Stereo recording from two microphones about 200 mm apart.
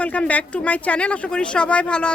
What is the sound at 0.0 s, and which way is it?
Speech, 5° left (ahead or behind).